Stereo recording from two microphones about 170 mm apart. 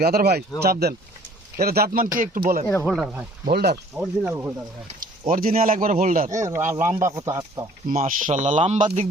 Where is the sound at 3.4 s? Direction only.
65° right (ahead or behind).